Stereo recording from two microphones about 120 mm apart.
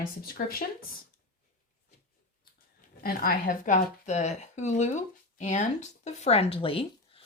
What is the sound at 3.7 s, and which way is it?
A woman's voice, 85° left.